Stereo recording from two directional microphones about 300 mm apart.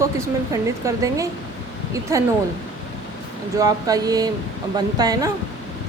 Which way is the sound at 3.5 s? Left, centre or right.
Centre.